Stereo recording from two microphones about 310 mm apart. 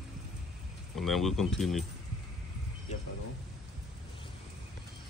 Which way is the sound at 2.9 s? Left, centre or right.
Left.